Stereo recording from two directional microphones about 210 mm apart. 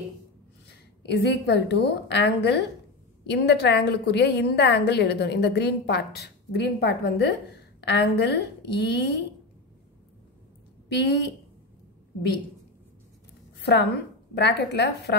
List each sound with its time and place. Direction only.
0.7 s a woman's voice: 55° left (ahead or behind)
11.0 s a woman's voice: 50° left (ahead or behind)
13.6 s a sound: 55° left (ahead or behind)
14.3 s a woman's voice: 55° left (ahead or behind)